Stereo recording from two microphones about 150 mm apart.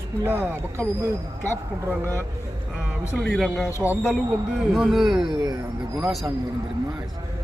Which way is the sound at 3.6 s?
20° left (ahead or behind).